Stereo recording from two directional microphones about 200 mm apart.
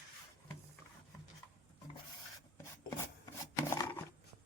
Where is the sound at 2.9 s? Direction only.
15° left (ahead or behind).